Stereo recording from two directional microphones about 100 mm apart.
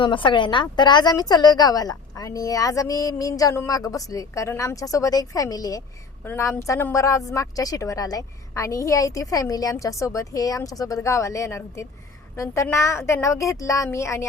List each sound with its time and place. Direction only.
0.0 s a woman's voice: 55° left (ahead or behind); by 5.8 s 35° left (ahead or behind)
6.2 s a woman's voice: 25° left (ahead or behind)